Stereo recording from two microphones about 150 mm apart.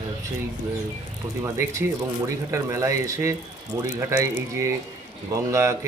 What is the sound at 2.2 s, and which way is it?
Speech, 20° right (ahead or behind).